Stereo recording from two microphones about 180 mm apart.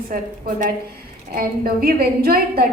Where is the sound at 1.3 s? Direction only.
55° right (ahead or behind).